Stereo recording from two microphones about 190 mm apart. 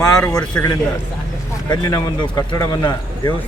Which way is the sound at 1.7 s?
20° left (ahead or behind).